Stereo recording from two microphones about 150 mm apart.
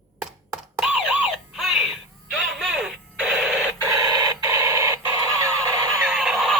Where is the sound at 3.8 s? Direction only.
25° right (ahead or behind).